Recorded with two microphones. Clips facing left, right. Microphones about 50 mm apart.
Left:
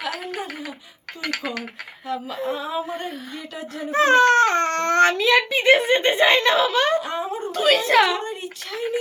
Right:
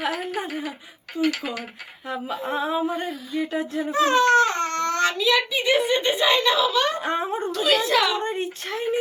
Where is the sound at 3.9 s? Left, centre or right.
Left.